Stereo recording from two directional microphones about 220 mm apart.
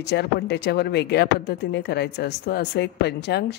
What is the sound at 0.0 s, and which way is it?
Speech, 50° left (ahead or behind).